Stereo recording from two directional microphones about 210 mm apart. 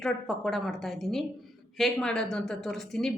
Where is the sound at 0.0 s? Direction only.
Centre (ahead or behind).